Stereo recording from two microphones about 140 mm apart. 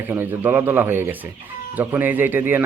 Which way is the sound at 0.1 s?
15° right (ahead or behind).